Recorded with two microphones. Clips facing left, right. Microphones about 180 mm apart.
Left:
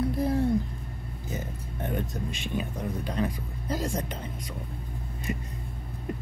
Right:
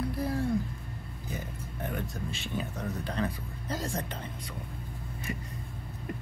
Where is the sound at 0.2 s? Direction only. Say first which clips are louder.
Left 5 dB; 20° left (ahead or behind).